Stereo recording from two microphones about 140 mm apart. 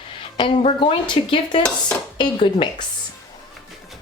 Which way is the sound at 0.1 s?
35° left (ahead or behind).